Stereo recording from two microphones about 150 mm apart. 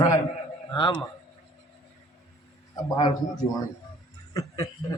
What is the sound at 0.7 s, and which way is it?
Speech, 35° left (ahead or behind).